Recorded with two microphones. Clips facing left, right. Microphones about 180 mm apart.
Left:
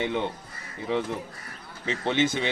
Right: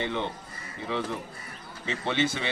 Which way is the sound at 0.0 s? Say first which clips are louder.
Left 3 dB; 15° left (ahead or behind).